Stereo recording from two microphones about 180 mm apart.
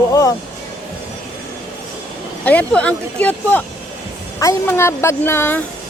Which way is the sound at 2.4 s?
5° left (ahead or behind).